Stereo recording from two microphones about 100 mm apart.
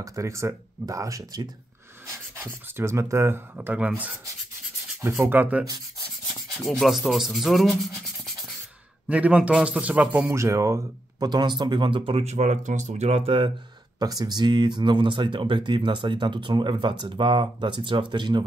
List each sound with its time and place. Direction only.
0.0 s speech: 30° right (ahead or behind)
2.3 s speech: 20° right (ahead or behind)
3.5 s a man's voice: 15° right (ahead or behind)
6.2 s rub: centre (ahead or behind)
9.1 s a man's voice: 15° right (ahead or behind)
10.3 s speech: 30° right (ahead or behind)
11.2 s speech: 45° right (ahead or behind); by 13.5 s 70° right (ahead or behind)
13.9 s speech: 40° right (ahead or behind)